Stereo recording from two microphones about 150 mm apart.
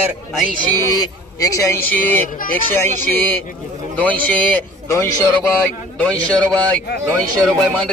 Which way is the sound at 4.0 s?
10° left (ahead or behind).